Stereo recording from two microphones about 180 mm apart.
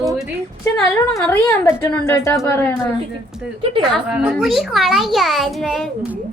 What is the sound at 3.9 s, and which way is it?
A child's voice, 5° right (ahead or behind).